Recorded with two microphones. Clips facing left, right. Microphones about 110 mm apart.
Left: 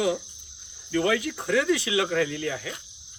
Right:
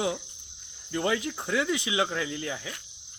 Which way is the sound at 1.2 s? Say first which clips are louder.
Left 4 dB; 25° right (ahead or behind).